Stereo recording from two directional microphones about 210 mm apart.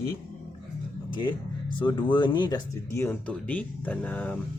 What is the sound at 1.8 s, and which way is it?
A man's voice, 20° left (ahead or behind).